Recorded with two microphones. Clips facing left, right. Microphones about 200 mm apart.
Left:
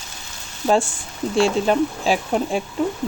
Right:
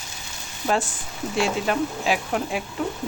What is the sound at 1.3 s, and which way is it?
Speech, 30° left (ahead or behind).